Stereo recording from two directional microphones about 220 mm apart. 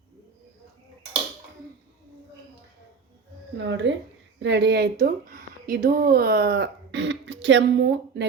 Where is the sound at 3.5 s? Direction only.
55° right (ahead or behind).